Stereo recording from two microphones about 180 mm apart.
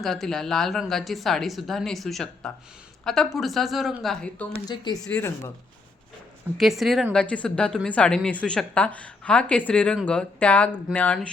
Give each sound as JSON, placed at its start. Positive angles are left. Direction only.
{"t": 0.0, "sound": "a woman's voice", "side_deg": 0}
{"t": 4.5, "sound": "speech", "side_deg": 25}
{"t": 5.0, "sound": "speech", "side_deg": 10}
{"t": 6.6, "sound": "a woman's voice", "side_deg": 0}